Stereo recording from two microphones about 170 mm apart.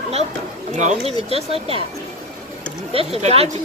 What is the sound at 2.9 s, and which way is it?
Speech, 35° right (ahead or behind).